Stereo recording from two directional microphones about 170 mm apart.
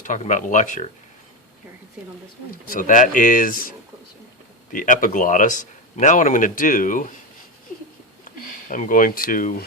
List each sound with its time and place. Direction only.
0.0 s a man's voice: 50° left (ahead or behind)
2.7 s a man's voice: 50° left (ahead or behind)
8.7 s a man's voice: 50° left (ahead or behind)